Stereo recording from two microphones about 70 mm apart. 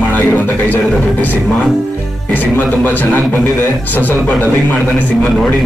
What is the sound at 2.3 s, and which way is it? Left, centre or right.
A man's voice, left.